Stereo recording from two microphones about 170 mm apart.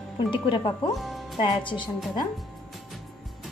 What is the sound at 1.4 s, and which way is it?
Speech, 25° left (ahead or behind).